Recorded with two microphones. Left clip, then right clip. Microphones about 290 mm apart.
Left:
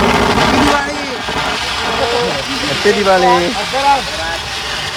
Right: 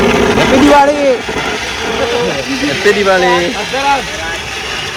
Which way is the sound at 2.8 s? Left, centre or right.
Centre.